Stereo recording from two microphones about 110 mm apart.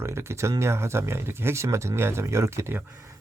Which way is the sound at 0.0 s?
25° right (ahead or behind).